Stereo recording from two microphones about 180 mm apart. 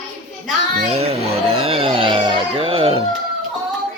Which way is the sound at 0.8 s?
35° right (ahead or behind).